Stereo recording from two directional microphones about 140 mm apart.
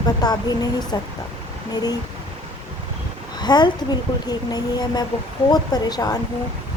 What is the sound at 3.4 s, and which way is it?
Speech, 30° left (ahead or behind).